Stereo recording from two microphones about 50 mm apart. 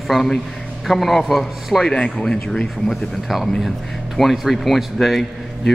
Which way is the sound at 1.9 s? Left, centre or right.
Left.